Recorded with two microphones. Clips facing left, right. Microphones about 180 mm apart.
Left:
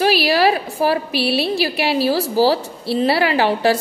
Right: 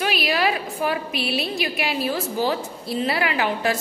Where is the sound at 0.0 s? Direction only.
35° left (ahead or behind).